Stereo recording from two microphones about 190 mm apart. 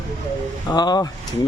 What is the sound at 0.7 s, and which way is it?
Speech, 20° left (ahead or behind).